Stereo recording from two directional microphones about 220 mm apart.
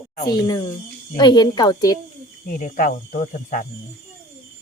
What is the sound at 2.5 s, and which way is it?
Speech, 35° left (ahead or behind).